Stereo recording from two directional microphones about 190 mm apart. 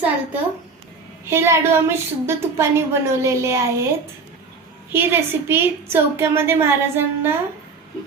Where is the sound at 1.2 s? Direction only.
15° right (ahead or behind).